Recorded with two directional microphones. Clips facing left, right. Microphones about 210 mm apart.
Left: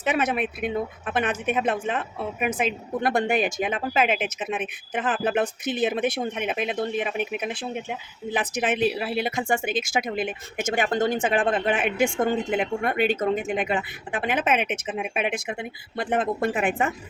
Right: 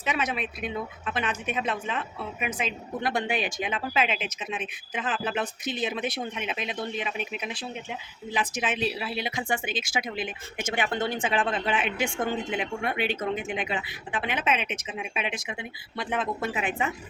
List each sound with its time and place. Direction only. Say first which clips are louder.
0.0 s a woman's voice: left 5 dB; 55° left (ahead or behind)